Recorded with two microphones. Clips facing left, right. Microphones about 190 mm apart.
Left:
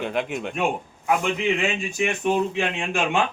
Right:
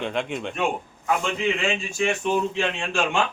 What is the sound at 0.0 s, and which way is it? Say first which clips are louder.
Speech: left 1 dB; 5° left (ahead or behind).